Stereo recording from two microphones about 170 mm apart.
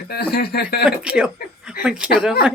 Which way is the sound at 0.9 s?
5° right (ahead or behind).